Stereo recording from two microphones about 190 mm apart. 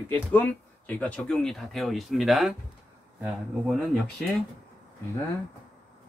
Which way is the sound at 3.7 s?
Centre (ahead or behind).